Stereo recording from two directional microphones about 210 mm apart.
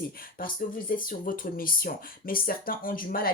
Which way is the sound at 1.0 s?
40° left (ahead or behind).